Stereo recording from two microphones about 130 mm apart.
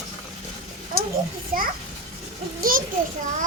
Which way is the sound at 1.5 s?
90° right.